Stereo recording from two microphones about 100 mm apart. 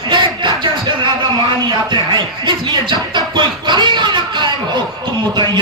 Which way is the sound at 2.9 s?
50° right (ahead or behind).